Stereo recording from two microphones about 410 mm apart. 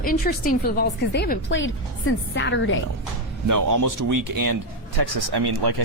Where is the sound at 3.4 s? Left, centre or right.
Right.